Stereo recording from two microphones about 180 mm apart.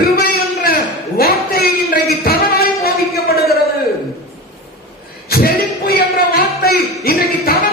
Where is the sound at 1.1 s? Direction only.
55° left (ahead or behind).